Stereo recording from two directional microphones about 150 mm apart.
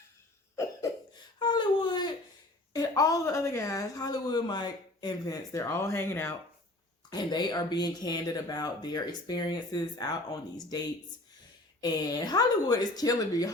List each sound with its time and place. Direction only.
1.4 s a sound: 30° left (ahead or behind)
2.7 s speech: 25° left (ahead or behind)
7.1 s speech: 30° left (ahead or behind)